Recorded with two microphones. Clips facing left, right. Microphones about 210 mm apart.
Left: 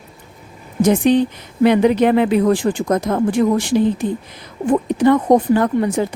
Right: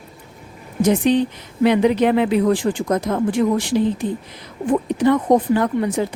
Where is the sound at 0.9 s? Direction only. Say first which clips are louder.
Left 2 dB; 50° left (ahead or behind).